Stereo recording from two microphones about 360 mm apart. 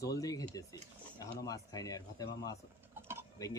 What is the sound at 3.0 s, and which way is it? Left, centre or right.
Mechanisms, centre.